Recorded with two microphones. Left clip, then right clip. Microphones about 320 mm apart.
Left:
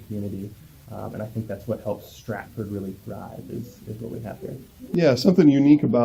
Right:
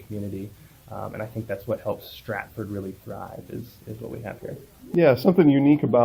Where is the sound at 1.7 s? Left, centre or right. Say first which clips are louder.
Even; right.